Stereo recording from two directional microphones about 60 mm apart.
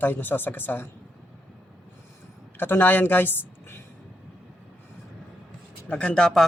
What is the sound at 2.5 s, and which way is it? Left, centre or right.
Speech, left.